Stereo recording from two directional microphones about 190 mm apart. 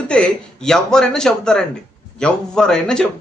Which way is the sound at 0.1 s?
5° left (ahead or behind).